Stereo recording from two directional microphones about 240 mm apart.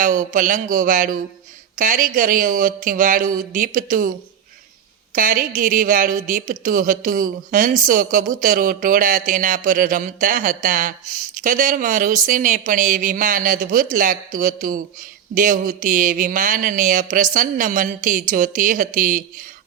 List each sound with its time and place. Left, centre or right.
0.0 s a woman's voice: right
5.1 s a woman's voice: right